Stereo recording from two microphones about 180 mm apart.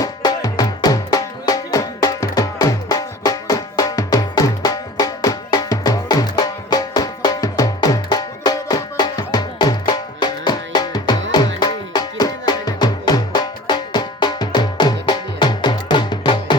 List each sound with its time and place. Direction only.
0.0 s music: 20° left (ahead or behind)